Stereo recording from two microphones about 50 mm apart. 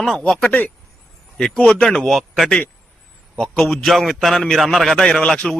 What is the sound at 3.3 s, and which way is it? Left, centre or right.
A man's voice, centre.